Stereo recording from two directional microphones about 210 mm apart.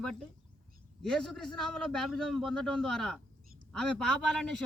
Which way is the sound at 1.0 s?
5° left (ahead or behind).